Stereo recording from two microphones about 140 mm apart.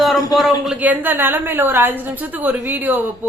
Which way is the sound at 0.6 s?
10° right (ahead or behind).